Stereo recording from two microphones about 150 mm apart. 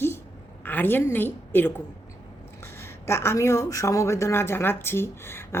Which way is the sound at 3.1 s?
15° left (ahead or behind).